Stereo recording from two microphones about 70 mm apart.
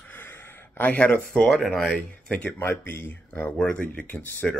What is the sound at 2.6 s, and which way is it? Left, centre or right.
Speech, left.